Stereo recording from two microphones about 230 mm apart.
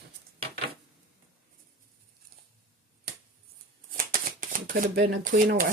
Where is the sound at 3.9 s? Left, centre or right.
Right.